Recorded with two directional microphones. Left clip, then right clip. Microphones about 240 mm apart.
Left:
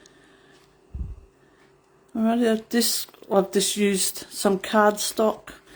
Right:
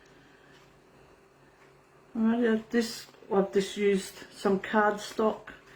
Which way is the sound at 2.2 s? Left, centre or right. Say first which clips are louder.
Left 5 dB; left.